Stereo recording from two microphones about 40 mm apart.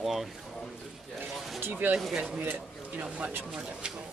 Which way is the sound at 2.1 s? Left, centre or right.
Centre.